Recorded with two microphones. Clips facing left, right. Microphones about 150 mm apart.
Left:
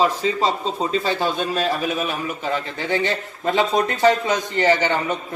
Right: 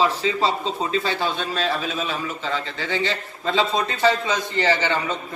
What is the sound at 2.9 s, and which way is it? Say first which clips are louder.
Speech: left 3 dB; 50° left (ahead or behind).